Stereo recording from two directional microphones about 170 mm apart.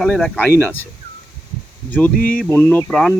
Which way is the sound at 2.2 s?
55° left (ahead or behind).